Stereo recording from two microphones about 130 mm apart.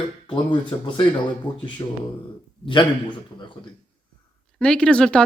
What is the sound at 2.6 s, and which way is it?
Speech, 40° left (ahead or behind).